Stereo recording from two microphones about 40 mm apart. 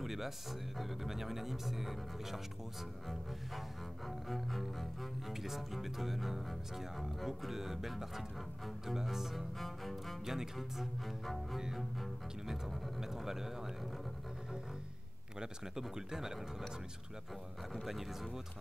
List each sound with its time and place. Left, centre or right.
0.0 s speech: centre
4.3 s speech: centre
10.2 s speech: centre
12.4 s speech: centre
15.3 s speech: centre